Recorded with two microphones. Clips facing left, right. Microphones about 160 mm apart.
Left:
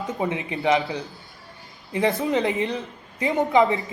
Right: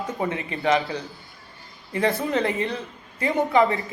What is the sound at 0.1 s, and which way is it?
Speech, 20° left (ahead or behind).